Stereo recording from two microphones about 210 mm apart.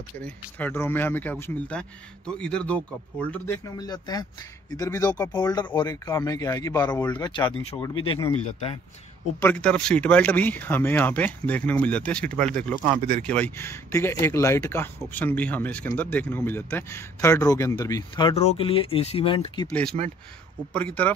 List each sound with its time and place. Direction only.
0.2 s speech: 10° left (ahead or behind); by 8.7 s 25° left (ahead or behind)
9.4 s speech: 5° left (ahead or behind)
12.8 s speech: 35° right (ahead or behind)
13.3 s speech: 10° left (ahead or behind)
19.7 s speech: 5° left (ahead or behind)